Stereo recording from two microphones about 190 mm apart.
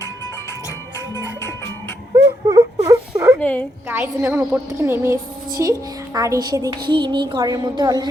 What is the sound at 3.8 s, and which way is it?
A woman's voice, 10° right (ahead or behind).